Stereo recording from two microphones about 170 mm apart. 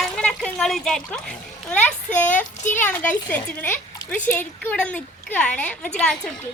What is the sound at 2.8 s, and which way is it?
Speech, 10° left (ahead or behind).